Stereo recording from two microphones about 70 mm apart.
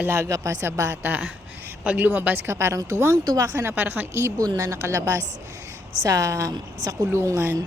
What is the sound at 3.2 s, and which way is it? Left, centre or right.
Speech, right.